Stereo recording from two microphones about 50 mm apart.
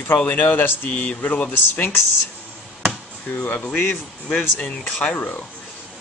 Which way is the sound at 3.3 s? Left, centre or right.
Left.